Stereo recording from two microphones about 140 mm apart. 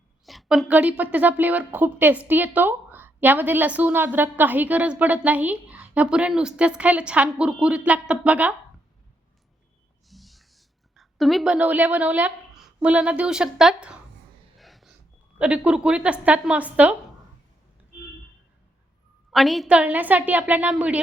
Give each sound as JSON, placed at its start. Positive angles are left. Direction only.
{"t": 0.3, "sound": "a woman's voice", "side_deg": 0}
{"t": 10.1, "sound": "speech", "side_deg": 0}
{"t": 14.6, "sound": "a sound", "side_deg": 0}
{"t": 15.4, "sound": "a woman's voice", "side_deg": -10}
{"t": 19.3, "sound": "a woman's voice", "side_deg": 0}